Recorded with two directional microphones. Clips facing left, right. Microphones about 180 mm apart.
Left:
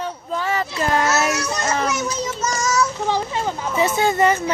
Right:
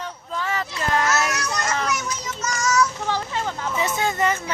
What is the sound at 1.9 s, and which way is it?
Child singing, 25° left (ahead or behind).